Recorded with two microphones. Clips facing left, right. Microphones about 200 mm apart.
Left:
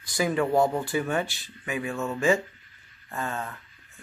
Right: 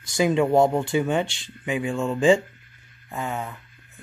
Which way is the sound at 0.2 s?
20° right (ahead or behind).